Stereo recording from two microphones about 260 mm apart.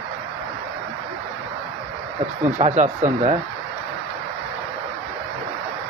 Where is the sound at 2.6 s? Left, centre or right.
Right.